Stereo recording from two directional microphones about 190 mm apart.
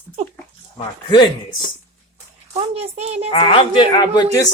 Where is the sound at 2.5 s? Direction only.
30° right (ahead or behind).